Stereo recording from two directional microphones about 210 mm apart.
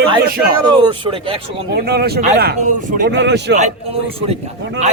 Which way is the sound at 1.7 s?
50° right (ahead or behind).